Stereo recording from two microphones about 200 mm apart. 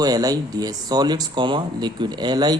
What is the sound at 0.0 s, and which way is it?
Speech, 20° right (ahead or behind).